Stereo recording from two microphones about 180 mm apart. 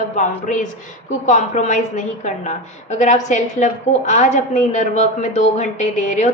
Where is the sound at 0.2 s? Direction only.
45° left (ahead or behind).